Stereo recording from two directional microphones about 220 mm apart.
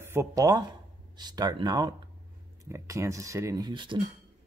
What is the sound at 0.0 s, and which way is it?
Speech, 10° right (ahead or behind).